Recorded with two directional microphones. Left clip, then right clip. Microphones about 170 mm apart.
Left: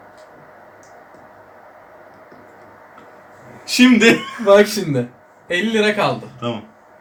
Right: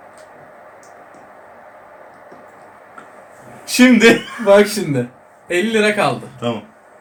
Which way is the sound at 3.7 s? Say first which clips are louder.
Right 2 dB; 15° right (ahead or behind).